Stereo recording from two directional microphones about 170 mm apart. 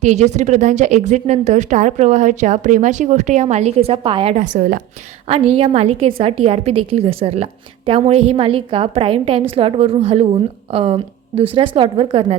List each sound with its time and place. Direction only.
0.0 s speech: 45° right (ahead or behind)
5.3 s a woman's voice: 35° right (ahead or behind)